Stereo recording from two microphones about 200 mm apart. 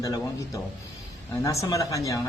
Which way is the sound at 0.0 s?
15° left (ahead or behind).